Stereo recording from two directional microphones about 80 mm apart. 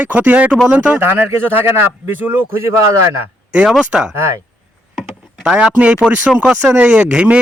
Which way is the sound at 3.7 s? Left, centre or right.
Centre.